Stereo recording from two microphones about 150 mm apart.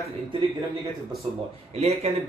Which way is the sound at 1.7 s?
45° right (ahead or behind).